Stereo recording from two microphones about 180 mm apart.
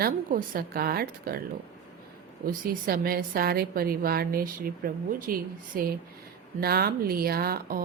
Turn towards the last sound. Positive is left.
turn(degrees=-55)  # may be behind; listen again after turning